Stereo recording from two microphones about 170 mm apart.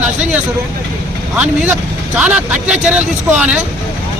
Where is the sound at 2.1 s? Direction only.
10° right (ahead or behind).